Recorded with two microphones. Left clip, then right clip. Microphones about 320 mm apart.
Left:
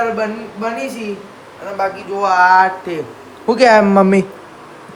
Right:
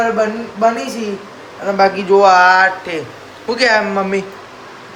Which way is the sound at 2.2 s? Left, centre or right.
Centre.